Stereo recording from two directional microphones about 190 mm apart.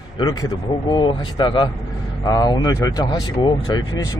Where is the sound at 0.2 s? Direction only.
20° left (ahead or behind).